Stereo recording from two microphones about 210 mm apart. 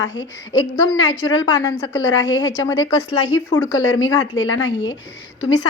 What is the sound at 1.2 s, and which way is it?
Speech, 20° left (ahead or behind).